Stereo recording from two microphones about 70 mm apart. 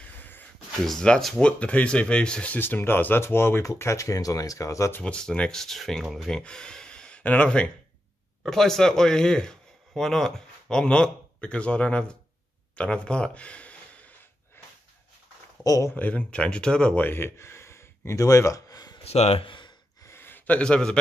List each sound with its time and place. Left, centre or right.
0.0 s a sound: left
0.8 s speech: centre
1.6 s speech: centre; by 4.9 s left
5.0 s speech: centre
12.7 s a sound: centre
15.6 s speech: left
15.9 s speech: left
17.0 s a sound: left
20.1 s gasp: left; by 21.0 s centre